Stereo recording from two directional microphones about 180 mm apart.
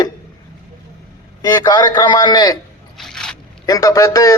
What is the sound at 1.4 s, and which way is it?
A man's voice, 20° left (ahead or behind).